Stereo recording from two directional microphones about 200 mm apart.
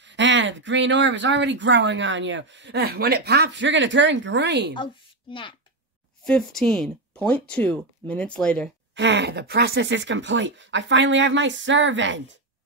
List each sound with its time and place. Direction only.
0.0 s speech: 65° right (ahead or behind)
5.3 s speech: 25° left (ahead or behind)
6.2 s speech: 5° left (ahead or behind)
8.9 s speech: 60° right (ahead or behind)